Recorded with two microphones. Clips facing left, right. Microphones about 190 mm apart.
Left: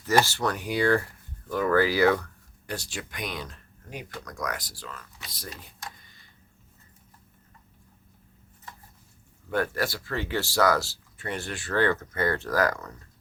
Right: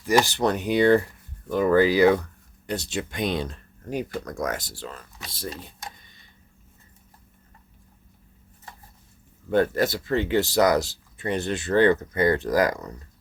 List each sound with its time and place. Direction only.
0.0 s speech: 15° right (ahead or behind)
9.5 s speech: 20° right (ahead or behind)